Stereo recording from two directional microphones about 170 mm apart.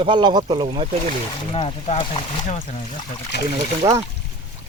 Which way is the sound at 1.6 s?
35° left (ahead or behind).